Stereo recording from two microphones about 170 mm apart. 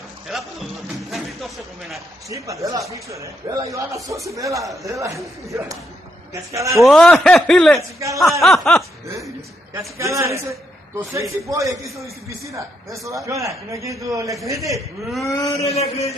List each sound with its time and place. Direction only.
0.3 s speech: centre (ahead or behind)
2.2 s a man's voice: 20° right (ahead or behind)
6.8 s speech: centre (ahead or behind)
9.8 s a man's voice: 15° right (ahead or behind)
15.2 s speech: 20° left (ahead or behind)
15.6 s a sound: 40° left (ahead or behind)